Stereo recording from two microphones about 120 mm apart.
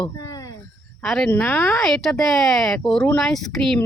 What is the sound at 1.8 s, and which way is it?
Speech, 5° left (ahead or behind).